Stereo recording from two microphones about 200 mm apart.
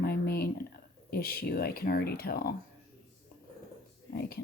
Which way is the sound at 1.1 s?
50° left (ahead or behind).